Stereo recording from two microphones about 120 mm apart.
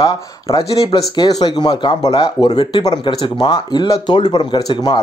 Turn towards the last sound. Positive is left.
turn(degrees=35)  # may be behind; listen again after turning